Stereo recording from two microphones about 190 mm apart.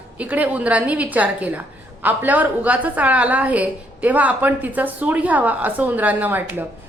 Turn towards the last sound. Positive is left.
turn(degrees=-10)  # may be behind; listen again after turning